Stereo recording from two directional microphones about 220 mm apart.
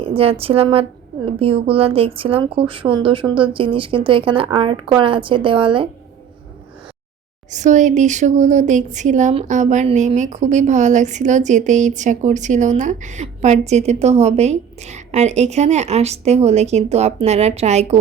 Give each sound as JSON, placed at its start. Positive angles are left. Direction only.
{"t": 0.0, "sound": "a woman's voice", "side_deg": -25}
{"t": 7.5, "sound": "speech", "side_deg": -35}